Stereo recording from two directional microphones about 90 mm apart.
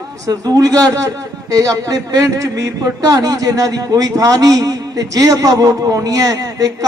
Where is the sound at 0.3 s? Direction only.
45° right (ahead or behind).